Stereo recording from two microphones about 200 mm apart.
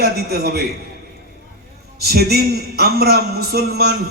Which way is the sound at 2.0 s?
50° right (ahead or behind).